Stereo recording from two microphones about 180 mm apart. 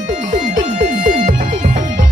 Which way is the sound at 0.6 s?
45° right (ahead or behind).